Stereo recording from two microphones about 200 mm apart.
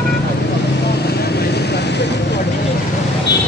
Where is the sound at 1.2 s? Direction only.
55° left (ahead or behind).